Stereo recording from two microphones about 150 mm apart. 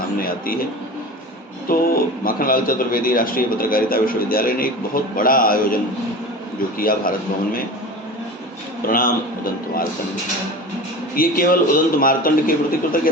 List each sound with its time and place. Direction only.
0.2 s a man's voice: 75° left (ahead or behind)
1.6 s a man's voice: 75° left (ahead or behind)
6.7 s a man's voice: 70° left (ahead or behind)
8.9 s a man's voice: 70° left (ahead or behind)
11.1 s a man's voice: 75° left (ahead or behind)